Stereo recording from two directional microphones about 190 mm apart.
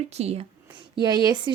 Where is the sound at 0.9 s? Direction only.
20° right (ahead or behind).